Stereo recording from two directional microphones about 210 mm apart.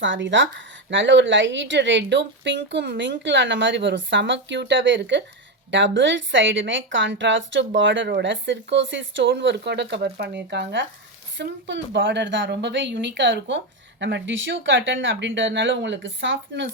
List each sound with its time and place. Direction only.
0.0 s a woman's voice: 60° right (ahead or behind)